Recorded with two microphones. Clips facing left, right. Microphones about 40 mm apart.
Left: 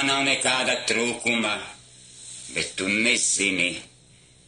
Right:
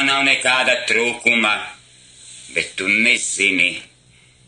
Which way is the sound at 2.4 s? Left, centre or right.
Right.